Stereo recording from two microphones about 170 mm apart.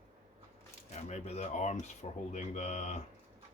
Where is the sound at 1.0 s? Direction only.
40° left (ahead or behind).